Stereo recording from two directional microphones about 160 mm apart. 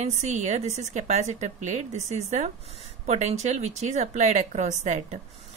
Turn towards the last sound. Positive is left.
turn(degrees=-45)  # may be behind; listen again after turning